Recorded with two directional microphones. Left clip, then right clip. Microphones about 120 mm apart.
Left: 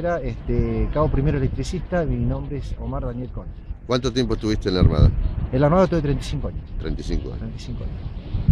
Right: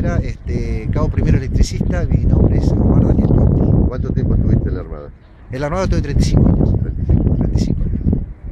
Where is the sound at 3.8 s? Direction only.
45° left (ahead or behind).